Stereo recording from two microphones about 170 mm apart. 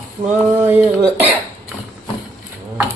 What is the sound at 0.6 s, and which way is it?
Speech, 15° right (ahead or behind).